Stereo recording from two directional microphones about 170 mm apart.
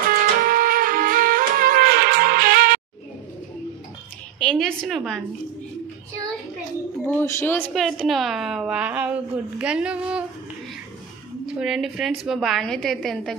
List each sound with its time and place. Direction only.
0.1 s music: 55° right (ahead or behind)
4.4 s a woman's voice: 5° left (ahead or behind)
7.1 s speech: 15° left (ahead or behind)
7.8 s a woman's voice: centre (ahead or behind)
11.4 s a woman's voice: 5° right (ahead or behind)